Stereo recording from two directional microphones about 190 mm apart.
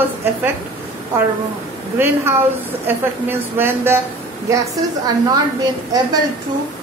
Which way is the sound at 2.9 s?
10° right (ahead or behind).